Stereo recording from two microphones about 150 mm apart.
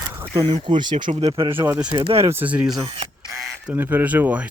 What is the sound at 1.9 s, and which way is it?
Speech, 40° right (ahead or behind).